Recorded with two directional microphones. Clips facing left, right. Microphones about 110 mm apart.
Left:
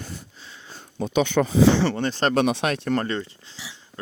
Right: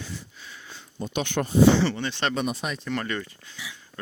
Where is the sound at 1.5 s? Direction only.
65° left (ahead or behind).